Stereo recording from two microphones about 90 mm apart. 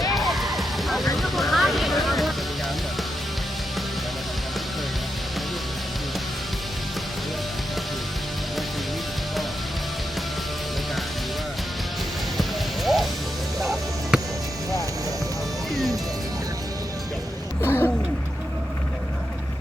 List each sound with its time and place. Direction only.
0.3 s music: centre (ahead or behind)
12.4 s music: centre (ahead or behind)
17.6 s a sound: 30° left (ahead or behind)